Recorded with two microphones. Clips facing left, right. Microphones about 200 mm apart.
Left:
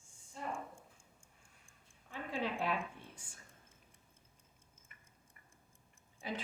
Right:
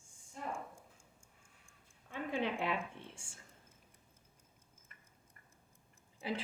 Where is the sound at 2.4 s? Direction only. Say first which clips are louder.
Left 1 dB; 20° right (ahead or behind).